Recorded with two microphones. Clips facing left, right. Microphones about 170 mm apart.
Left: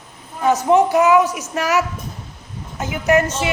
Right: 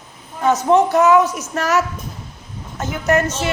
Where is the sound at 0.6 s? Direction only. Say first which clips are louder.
Even; 15° left (ahead or behind).